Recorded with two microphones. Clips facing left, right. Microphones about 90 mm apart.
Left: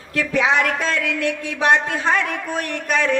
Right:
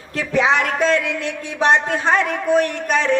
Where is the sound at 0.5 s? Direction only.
40° right (ahead or behind).